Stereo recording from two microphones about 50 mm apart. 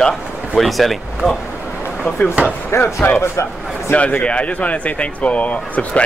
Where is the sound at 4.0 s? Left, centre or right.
Left.